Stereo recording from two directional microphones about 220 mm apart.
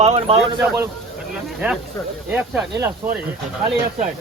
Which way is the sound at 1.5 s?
5° right (ahead or behind).